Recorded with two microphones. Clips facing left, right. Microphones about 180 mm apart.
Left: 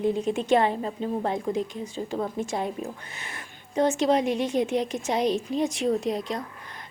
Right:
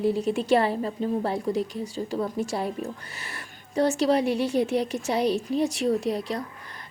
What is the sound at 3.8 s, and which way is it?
A woman's voice, 35° right (ahead or behind).